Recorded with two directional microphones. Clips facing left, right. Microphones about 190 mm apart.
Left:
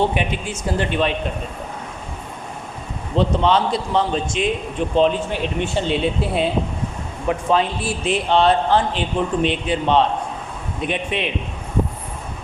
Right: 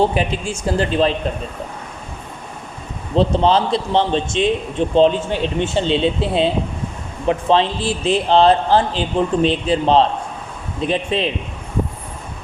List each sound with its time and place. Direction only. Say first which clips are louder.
0.1 s a man's voice: right 3 dB; 35° right (ahead or behind)
3.2 s a man's voice: right 2 dB; 30° right (ahead or behind)